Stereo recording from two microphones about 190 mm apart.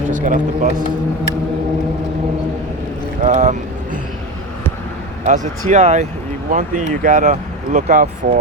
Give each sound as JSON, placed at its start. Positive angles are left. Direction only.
{"t": 0.0, "sound": "a man's voice", "side_deg": -40}
{"t": 3.2, "sound": "speech", "side_deg": -40}
{"t": 5.2, "sound": "speech", "side_deg": -40}